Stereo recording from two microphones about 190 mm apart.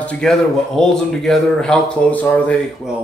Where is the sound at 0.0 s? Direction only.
5° left (ahead or behind).